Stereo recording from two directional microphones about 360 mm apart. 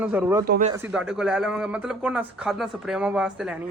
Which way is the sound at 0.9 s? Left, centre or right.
Centre.